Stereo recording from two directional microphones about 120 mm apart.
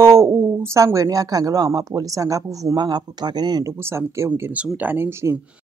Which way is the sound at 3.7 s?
20° right (ahead or behind).